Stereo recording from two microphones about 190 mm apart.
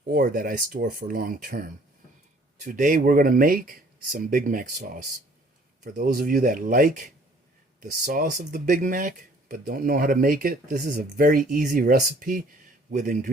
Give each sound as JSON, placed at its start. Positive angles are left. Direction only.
{"t": 0.1, "sound": "speech", "side_deg": -50}